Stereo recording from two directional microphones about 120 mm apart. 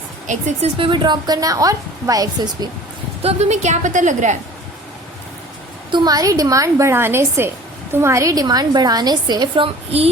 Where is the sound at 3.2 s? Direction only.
70° right (ahead or behind); by 4.3 s 90° right.